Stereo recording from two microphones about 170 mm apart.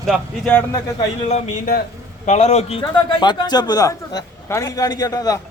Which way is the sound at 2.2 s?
40° left (ahead or behind).